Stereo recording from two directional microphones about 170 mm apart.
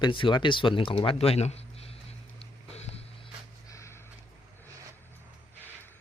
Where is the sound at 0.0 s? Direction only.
30° left (ahead or behind).